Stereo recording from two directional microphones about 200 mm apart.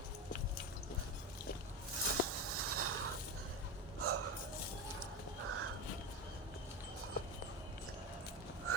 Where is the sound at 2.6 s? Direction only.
90° right.